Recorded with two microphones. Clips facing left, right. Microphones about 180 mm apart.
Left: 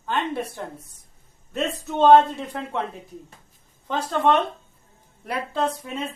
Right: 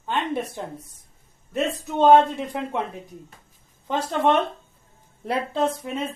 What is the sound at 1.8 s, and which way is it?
Speech, 15° right (ahead or behind).